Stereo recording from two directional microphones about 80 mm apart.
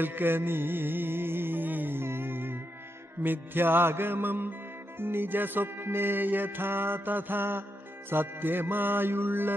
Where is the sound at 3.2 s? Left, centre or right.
Right.